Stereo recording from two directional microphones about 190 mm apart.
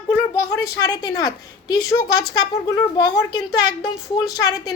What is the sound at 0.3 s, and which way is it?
A woman's voice, 20° left (ahead or behind).